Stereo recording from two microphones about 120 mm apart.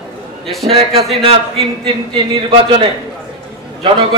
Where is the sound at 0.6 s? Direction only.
55° right (ahead or behind).